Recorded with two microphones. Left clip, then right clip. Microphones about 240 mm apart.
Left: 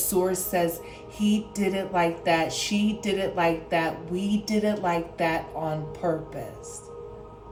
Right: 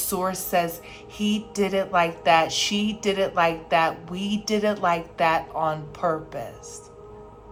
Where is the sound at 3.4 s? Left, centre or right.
Centre.